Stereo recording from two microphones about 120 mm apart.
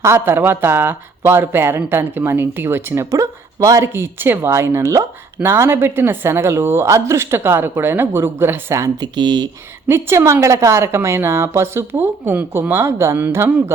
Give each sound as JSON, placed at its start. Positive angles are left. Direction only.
{"t": 0.0, "sound": "speech", "side_deg": -20}
{"t": 9.1, "sound": "speech", "side_deg": -35}
{"t": 9.9, "sound": "speech", "side_deg": -20}